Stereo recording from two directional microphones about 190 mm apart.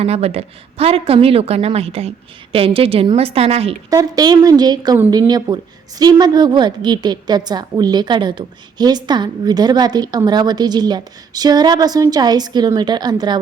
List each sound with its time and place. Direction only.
0.0 s a woman's voice: 35° right (ahead or behind)
3.8 s a woman's voice: 20° right (ahead or behind)